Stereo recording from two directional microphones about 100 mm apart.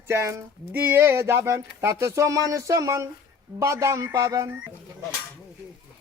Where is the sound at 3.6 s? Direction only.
30° right (ahead or behind).